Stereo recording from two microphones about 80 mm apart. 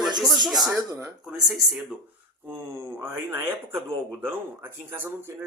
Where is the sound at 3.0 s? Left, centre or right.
Right.